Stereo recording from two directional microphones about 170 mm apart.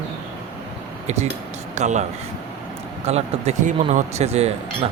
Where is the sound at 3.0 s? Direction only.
40° right (ahead or behind).